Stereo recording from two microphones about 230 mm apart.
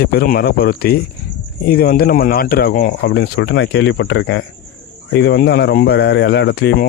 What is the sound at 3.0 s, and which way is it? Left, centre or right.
Speech, left.